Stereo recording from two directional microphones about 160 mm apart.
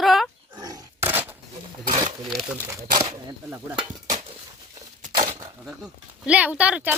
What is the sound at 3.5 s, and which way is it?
Speech, 10° right (ahead or behind).